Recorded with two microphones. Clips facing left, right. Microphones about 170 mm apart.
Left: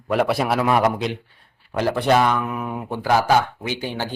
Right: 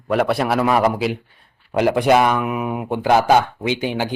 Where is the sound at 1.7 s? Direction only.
15° right (ahead or behind).